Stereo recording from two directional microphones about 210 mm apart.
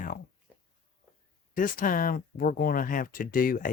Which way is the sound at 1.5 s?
40° left (ahead or behind).